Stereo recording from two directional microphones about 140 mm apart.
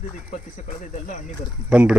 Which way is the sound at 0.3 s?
60° left (ahead or behind).